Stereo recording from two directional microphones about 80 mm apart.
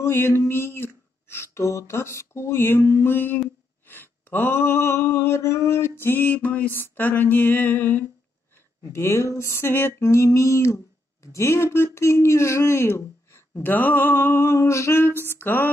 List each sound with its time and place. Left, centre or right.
0.0 s speech: left
3.8 s a sound: left
8.9 s speech: left